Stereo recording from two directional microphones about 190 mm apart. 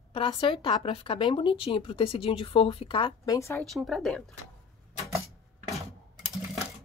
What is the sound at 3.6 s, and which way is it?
Speech, centre (ahead or behind).